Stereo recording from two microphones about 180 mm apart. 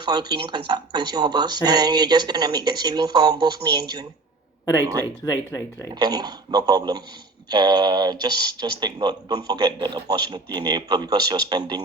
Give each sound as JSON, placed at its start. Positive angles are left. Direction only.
{"t": 0.0, "sound": "speech", "side_deg": -25}
{"t": 5.2, "sound": "speech", "side_deg": 20}
{"t": 5.9, "sound": "speech", "side_deg": -20}